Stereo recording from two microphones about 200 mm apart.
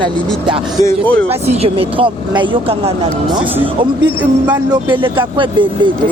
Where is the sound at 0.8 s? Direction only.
10° left (ahead or behind).